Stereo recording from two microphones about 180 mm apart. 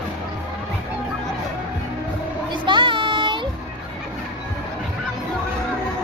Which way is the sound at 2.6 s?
25° right (ahead or behind).